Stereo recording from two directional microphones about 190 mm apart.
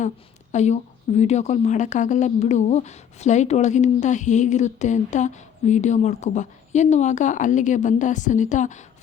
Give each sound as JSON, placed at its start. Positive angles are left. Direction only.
{"t": 0.5, "sound": "a woman's voice", "side_deg": 35}